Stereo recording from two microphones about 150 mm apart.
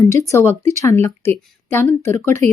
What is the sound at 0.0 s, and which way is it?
Speech, 20° left (ahead or behind).